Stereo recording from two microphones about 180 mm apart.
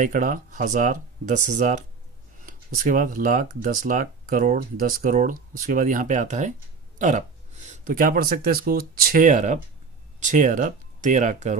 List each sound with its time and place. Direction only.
0.0 s speech: 45° right (ahead or behind)